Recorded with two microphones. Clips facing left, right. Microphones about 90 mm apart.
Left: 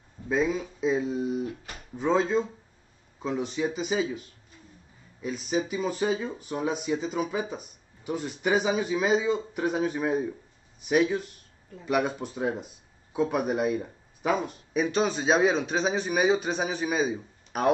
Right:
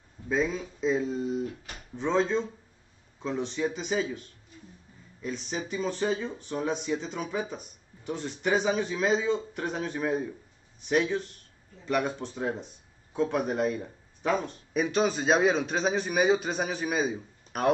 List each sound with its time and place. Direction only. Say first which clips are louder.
0.3 s speech: left 2 dB; 5° left (ahead or behind)